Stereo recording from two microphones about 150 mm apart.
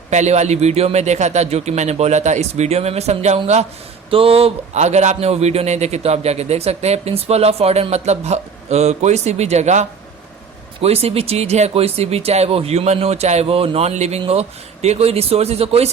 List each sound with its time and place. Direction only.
0.1 s a man's voice: 50° right (ahead or behind)